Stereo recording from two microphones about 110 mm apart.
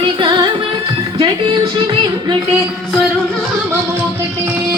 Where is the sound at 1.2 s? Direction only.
50° right (ahead or behind).